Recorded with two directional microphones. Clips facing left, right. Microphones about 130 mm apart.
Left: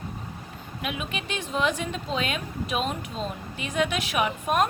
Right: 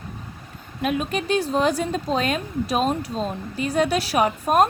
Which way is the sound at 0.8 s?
40° right (ahead or behind).